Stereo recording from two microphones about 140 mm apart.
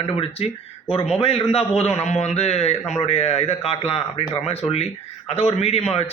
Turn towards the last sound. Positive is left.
turn(degrees=45)  # may be behind; listen again after turning